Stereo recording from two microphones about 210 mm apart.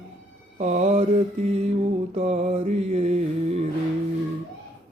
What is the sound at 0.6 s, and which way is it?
Mantra, 30° right (ahead or behind).